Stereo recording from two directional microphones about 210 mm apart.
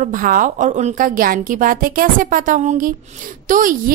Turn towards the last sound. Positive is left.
turn(degrees=-40)  # may be behind; listen again after turning